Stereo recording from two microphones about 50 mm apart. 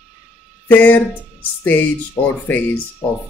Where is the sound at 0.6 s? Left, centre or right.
Left.